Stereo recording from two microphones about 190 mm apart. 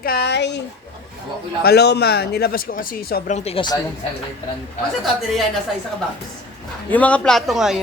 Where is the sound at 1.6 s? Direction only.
60° left (ahead or behind).